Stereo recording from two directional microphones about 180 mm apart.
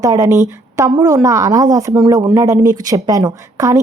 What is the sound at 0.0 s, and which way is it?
A woman's voice, 20° right (ahead or behind).